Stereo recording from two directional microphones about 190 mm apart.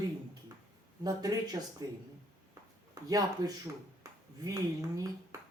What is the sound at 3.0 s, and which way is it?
Speech, 20° right (ahead or behind).